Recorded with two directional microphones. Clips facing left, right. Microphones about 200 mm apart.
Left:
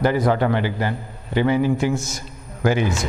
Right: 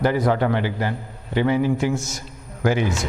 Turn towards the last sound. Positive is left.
turn(degrees=10)  # may be behind; listen again after turning